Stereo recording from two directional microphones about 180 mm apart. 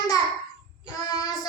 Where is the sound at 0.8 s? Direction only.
20° left (ahead or behind).